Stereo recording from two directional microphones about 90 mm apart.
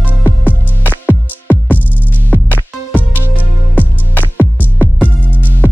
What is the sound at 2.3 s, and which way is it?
Music, 20° left (ahead or behind).